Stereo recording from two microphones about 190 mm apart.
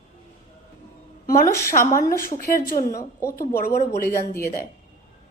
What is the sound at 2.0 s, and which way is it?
A woman's voice, 50° left (ahead or behind).